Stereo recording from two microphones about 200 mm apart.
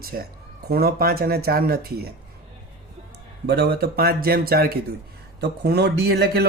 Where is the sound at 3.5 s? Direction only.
55° right (ahead or behind).